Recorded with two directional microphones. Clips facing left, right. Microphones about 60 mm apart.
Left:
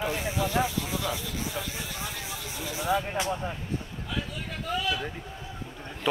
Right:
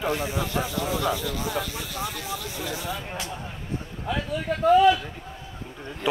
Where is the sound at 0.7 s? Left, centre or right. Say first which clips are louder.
Right 5 dB; right.